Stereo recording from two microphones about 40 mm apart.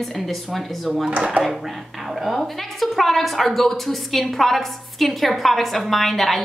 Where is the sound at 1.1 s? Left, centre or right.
Right.